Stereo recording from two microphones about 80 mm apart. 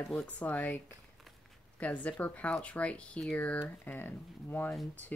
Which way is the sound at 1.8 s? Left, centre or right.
Centre.